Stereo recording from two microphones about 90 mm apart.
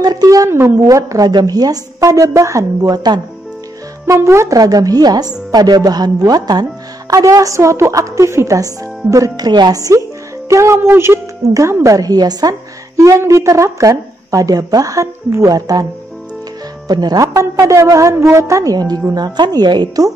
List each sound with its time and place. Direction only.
0.0 s speech: 45° right (ahead or behind)
4.0 s speech: 30° right (ahead or behind)
9.5 s speech: 50° right (ahead or behind); by 11.1 s 25° right (ahead or behind)
11.5 s speech: 35° right (ahead or behind)
17.3 s speech: 35° right (ahead or behind); by 20.1 s 50° right (ahead or behind)